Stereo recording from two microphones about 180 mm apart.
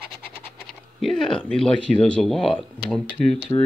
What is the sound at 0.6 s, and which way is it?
Speech, 5° left (ahead or behind).